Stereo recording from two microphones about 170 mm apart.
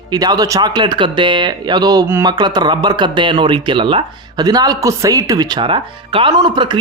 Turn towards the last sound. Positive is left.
turn(degrees=-25)  # may be behind; listen again after turning